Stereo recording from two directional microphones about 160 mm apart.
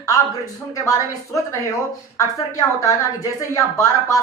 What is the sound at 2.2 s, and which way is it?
Speech, 20° left (ahead or behind).